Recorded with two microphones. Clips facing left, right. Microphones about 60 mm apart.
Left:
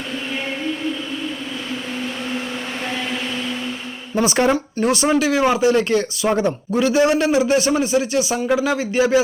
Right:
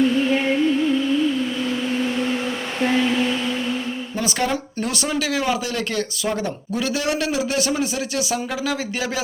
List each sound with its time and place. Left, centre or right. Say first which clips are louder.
4.1 s speech: left 7 dB; left
6.7 s a man's voice: left 7 dB; centre